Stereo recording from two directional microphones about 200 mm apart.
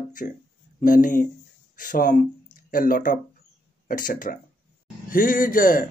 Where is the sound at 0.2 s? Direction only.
45° left (ahead or behind).